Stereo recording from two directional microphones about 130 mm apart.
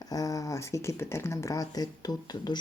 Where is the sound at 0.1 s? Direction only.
25° left (ahead or behind).